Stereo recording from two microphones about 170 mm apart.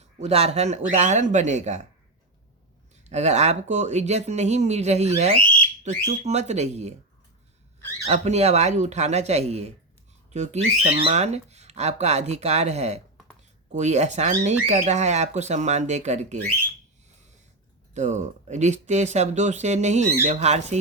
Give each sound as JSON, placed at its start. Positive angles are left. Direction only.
{"t": 0.2, "sound": "speech", "side_deg": -35}
{"t": 2.9, "sound": "speech", "side_deg": -40}
{"t": 8.0, "sound": "speech", "side_deg": -40}
{"t": 17.9, "sound": "speech", "side_deg": -45}